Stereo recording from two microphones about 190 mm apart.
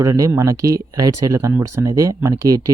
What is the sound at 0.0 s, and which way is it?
Speech, 15° right (ahead or behind).